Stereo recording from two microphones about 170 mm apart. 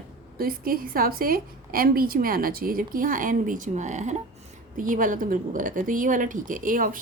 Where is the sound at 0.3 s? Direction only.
60° right (ahead or behind).